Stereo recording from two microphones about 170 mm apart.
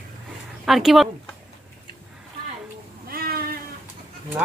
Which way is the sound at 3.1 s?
60° right (ahead or behind).